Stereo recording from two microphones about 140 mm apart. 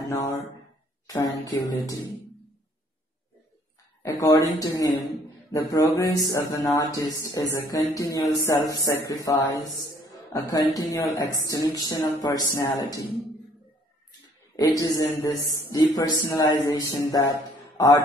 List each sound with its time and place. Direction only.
0.1 s a man's voice: 20° left (ahead or behind)
4.0 s a man's voice: 25° left (ahead or behind)
10.7 s a man's voice: 25° left (ahead or behind)
14.6 s a man's voice: 25° left (ahead or behind)